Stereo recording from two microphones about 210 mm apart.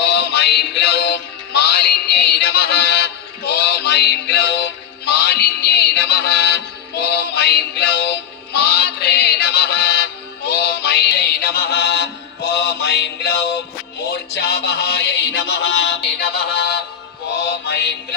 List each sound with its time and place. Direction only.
0.0 s music: 50° left (ahead or behind)